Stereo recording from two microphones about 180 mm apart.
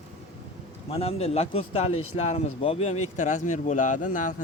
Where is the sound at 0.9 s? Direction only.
35° left (ahead or behind).